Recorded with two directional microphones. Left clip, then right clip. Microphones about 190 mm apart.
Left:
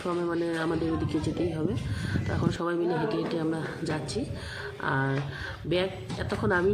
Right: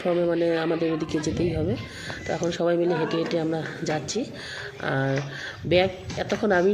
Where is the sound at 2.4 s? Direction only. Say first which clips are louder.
Right 6 dB; 10° right (ahead or behind).